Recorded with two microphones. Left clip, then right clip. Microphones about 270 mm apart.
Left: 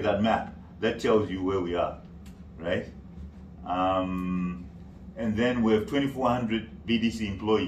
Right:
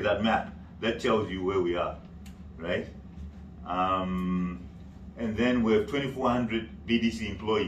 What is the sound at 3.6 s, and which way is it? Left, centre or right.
A man's voice, left.